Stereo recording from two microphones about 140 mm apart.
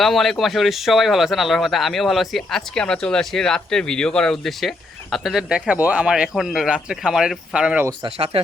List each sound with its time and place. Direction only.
0.0 s a man's voice: centre (ahead or behind)